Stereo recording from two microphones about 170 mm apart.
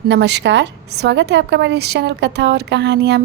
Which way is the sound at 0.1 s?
90° right.